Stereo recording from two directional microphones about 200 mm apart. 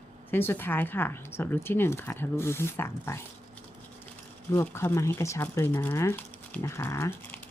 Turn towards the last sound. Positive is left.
turn(degrees=15)  # may be behind; listen again after turning